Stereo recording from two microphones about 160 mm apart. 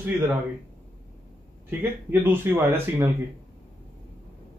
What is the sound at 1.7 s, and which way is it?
Speech, 15° right (ahead or behind).